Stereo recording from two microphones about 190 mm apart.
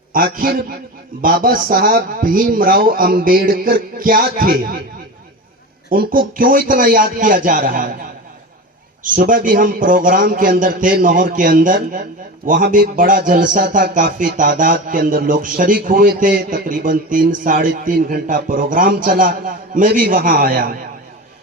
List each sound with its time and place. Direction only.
0.1 s a man's voice: 50° right (ahead or behind)
5.9 s a man's voice: 50° right (ahead or behind)
9.1 s a man's voice: 45° right (ahead or behind)